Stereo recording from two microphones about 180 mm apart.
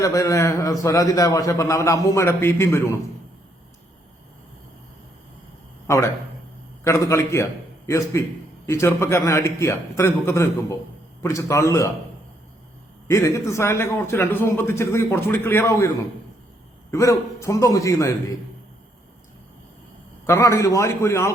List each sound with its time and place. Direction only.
0.0 s a man's voice: 20° left (ahead or behind)
6.8 s a man's voice: 15° left (ahead or behind)
13.1 s a man's voice: 15° left (ahead or behind)
20.2 s a man's voice: 15° left (ahead or behind)